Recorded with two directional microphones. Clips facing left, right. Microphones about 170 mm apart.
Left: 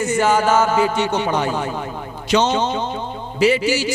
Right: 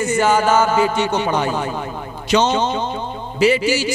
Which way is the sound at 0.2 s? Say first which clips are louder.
Right 1 dB; 15° right (ahead or behind).